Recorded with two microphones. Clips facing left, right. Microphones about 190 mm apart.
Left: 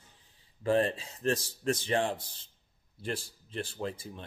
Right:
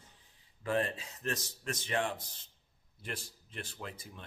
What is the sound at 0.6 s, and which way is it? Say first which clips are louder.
Speech: left 6 dB; 30° left (ahead or behind).